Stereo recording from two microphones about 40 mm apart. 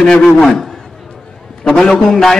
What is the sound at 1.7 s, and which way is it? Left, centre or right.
Speech, centre.